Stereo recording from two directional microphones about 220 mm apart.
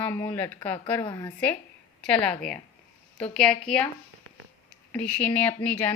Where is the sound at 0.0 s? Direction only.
10° left (ahead or behind).